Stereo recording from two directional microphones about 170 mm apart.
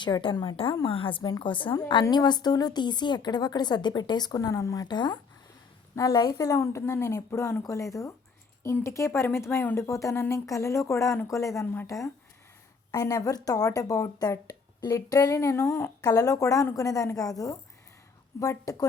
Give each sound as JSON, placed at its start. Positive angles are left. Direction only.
{"t": 0.0, "sound": "speech", "side_deg": 30}